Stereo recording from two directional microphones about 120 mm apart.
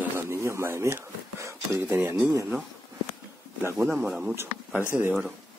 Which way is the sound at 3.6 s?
20° right (ahead or behind).